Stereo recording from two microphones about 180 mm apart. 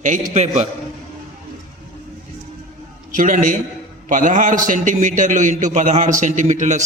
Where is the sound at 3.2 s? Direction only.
45° right (ahead or behind).